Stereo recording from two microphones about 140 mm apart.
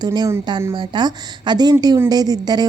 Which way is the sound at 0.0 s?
30° right (ahead or behind).